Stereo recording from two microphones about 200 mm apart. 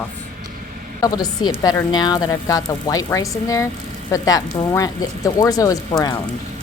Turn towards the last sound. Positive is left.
turn(degrees=20)  # may be behind; listen again after turning